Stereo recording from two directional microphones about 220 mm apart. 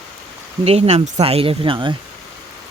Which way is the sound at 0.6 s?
30° right (ahead or behind).